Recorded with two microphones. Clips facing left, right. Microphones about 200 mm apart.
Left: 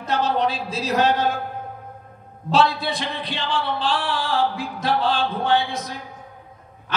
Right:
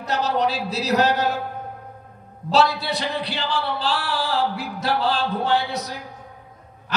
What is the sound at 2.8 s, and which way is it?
Speech, 40° right (ahead or behind).